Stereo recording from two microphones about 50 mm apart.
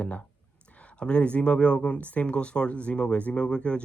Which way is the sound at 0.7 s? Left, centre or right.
Left.